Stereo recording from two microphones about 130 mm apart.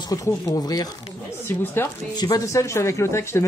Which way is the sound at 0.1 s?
25° left (ahead or behind).